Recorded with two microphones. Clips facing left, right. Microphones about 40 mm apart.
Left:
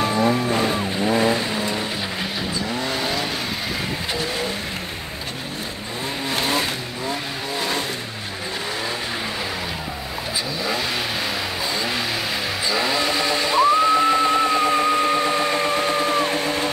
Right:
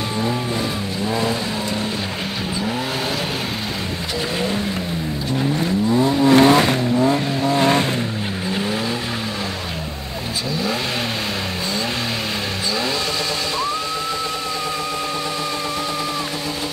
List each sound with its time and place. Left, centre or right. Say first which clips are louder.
1.0 s vehicle: left 2 dB; left
6.2 s vehicle: right 10 dB; right
7.5 s vehicle: right 8 dB; right
12.7 s vehicle: left 3 dB; centre
14.2 s vehicle: left 7 dB; left